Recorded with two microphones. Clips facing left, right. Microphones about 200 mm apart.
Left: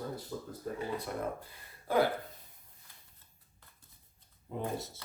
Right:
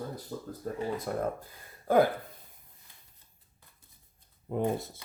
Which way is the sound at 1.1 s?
45° right (ahead or behind).